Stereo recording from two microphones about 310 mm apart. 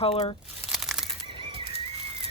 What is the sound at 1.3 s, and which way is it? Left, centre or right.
Bird flight, centre.